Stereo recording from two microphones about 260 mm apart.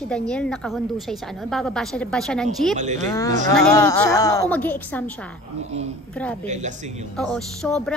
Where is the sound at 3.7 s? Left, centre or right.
Centre.